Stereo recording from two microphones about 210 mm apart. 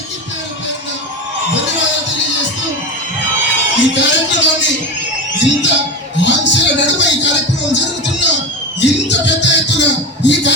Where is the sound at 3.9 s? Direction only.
60° left (ahead or behind).